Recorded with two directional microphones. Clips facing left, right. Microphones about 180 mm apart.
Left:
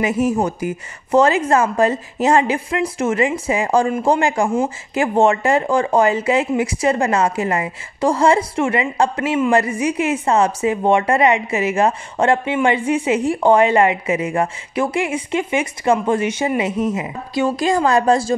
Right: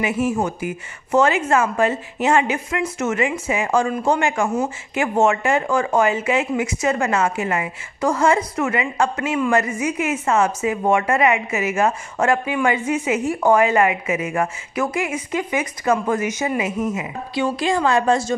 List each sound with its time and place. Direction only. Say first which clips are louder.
0.0 s speech: left 3 dB; 40° left (ahead or behind)